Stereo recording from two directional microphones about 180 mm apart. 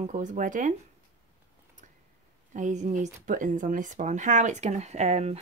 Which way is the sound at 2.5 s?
45° right (ahead or behind).